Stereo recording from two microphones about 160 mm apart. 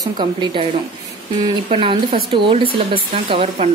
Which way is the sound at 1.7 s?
35° right (ahead or behind).